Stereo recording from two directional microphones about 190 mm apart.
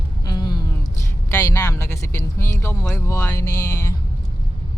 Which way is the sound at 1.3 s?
15° left (ahead or behind).